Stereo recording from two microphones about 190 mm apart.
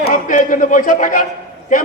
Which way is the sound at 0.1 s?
45° left (ahead or behind).